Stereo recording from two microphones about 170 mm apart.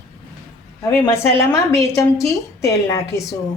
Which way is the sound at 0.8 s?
15° left (ahead or behind).